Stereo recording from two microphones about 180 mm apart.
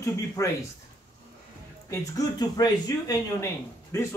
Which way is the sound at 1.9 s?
20° left (ahead or behind).